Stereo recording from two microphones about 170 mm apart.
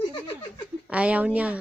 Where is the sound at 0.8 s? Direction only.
5° right (ahead or behind).